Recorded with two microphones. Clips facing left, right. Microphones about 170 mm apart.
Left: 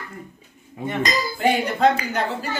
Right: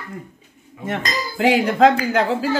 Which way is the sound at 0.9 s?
90° right.